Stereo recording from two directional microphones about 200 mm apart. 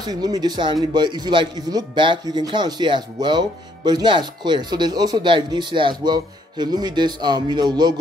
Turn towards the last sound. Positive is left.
turn(degrees=-20)  # may be behind; listen again after turning